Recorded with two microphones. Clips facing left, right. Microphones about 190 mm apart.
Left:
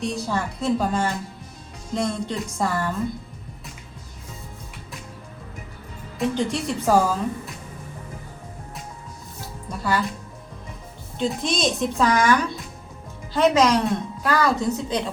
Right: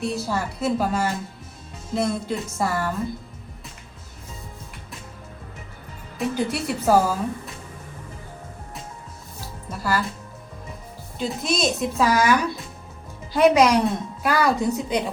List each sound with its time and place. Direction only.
0.0 s speech: 5° right (ahead or behind)
6.1 s speech: 5° right (ahead or behind)
9.6 s speech: centre (ahead or behind)
11.2 s a woman's voice: 5° right (ahead or behind)